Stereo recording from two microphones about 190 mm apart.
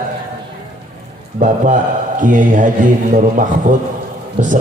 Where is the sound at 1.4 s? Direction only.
45° right (ahead or behind).